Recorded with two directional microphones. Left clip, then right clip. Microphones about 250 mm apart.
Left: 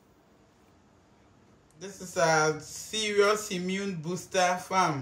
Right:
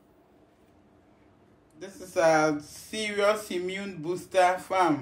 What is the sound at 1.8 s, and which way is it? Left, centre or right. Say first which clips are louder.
Speech: right 3 dB; right.